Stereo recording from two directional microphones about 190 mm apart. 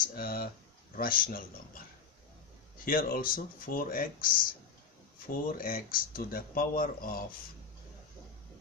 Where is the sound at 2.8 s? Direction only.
50° left (ahead or behind).